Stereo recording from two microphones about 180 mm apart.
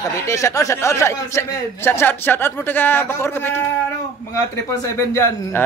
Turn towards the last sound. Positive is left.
turn(degrees=15)  # may be behind; listen again after turning